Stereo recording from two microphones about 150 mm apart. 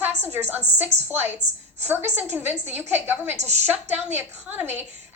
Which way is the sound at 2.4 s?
15° right (ahead or behind).